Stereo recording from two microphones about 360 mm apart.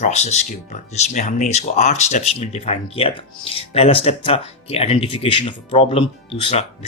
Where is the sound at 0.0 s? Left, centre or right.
Centre.